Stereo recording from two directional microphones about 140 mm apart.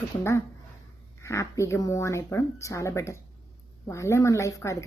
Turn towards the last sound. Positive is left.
turn(degrees=20)  # may be behind; listen again after turning